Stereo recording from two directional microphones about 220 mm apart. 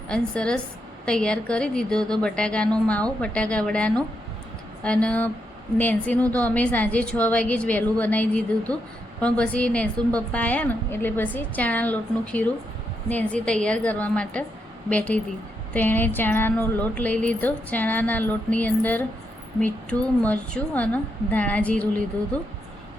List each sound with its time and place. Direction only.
0.1 s a woman's voice: 5° left (ahead or behind)